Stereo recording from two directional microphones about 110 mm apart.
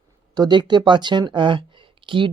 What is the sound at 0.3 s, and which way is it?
Speech, 40° right (ahead or behind).